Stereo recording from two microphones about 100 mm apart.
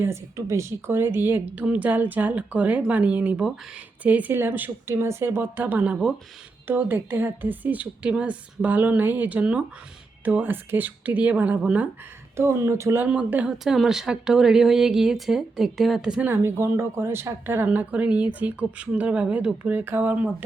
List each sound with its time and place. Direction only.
0.0 s a woman's voice: 30° right (ahead or behind); by 6.1 s 5° right (ahead or behind)
6.7 s a woman's voice: 20° right (ahead or behind)
12.4 s speech: 30° right (ahead or behind)
13.1 s speech: 10° right (ahead or behind)
16.2 s a woman's voice: 25° right (ahead or behind)